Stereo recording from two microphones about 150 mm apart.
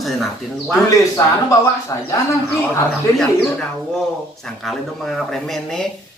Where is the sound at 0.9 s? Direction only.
25° left (ahead or behind).